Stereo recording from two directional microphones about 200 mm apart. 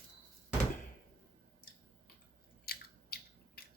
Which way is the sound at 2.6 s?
50° left (ahead or behind).